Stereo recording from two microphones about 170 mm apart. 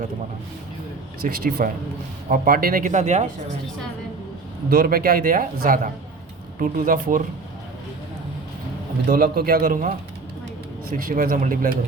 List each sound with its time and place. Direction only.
1.2 s speech: 60° right (ahead or behind); by 3.2 s 45° right (ahead or behind)
4.7 s speech: 60° right (ahead or behind)
9.0 s speech: 65° right (ahead or behind)
10.9 s speech: 55° right (ahead or behind)